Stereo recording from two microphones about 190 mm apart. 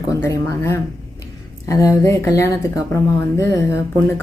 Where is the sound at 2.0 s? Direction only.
15° left (ahead or behind).